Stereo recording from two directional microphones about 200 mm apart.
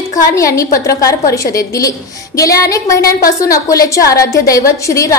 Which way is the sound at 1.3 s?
15° left (ahead or behind).